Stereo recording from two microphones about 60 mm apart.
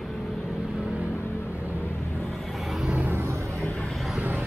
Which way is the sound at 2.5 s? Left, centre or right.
Centre.